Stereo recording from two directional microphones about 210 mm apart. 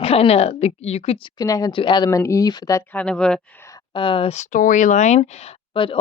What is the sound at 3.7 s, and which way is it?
Speech, 20° left (ahead or behind).